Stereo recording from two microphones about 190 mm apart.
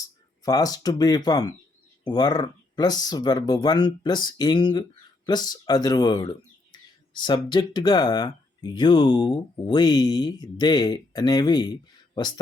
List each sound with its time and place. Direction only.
0.4 s speech: 20° left (ahead or behind)